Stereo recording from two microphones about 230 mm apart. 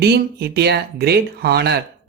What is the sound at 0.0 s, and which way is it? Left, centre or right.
Speech, right.